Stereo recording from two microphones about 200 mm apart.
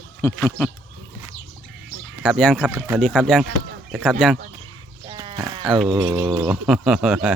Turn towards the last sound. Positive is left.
turn(degrees=-5)  # may be behind; listen again after turning